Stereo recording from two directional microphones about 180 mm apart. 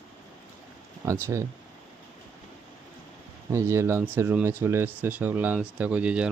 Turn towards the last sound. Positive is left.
turn(degrees=-5)  # may be behind; listen again after turning